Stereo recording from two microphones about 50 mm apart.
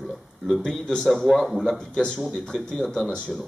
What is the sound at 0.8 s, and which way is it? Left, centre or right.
Speech, centre.